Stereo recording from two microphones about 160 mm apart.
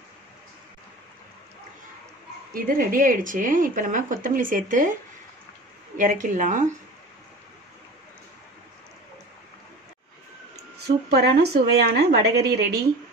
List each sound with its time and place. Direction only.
2.5 s speech: 60° right (ahead or behind)
5.9 s speech: 55° right (ahead or behind)
10.5 s speech: 85° right